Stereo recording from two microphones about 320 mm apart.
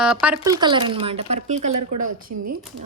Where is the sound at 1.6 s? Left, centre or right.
Right.